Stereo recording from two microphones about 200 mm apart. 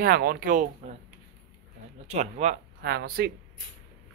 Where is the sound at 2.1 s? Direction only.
35° right (ahead or behind).